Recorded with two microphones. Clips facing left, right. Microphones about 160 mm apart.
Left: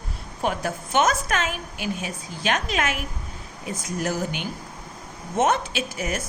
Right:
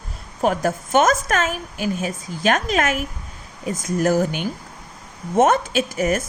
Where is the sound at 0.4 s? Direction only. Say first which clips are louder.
Right 6 dB; 45° right (ahead or behind).